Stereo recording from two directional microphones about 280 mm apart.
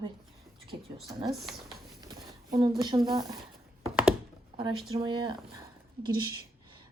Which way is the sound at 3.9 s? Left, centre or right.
Centre.